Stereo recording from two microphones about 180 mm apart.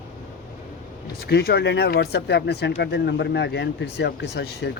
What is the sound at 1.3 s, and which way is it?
Speech, 60° left (ahead or behind).